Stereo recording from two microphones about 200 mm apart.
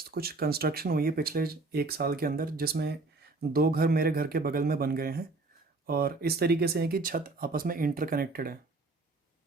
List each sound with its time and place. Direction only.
0.0 s speech: 50° right (ahead or behind)